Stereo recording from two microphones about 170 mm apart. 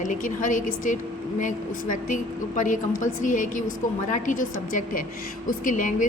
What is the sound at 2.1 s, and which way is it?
A woman's voice, 50° left (ahead or behind).